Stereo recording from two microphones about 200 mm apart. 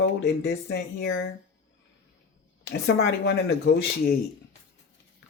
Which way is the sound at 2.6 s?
55° left (ahead or behind).